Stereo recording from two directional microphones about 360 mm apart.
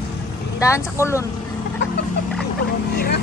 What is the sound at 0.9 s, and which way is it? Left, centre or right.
Speech, centre.